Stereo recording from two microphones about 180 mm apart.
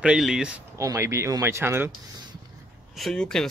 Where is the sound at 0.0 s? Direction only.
5° right (ahead or behind).